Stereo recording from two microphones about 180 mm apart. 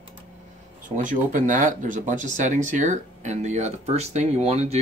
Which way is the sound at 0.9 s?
45° right (ahead or behind).